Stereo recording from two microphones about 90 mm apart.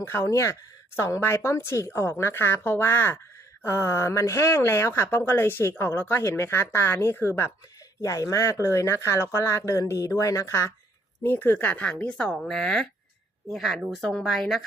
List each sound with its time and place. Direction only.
0.0 s speech: 30° left (ahead or behind)
11.3 s a woman's voice: 20° left (ahead or behind); by 14.6 s centre (ahead or behind)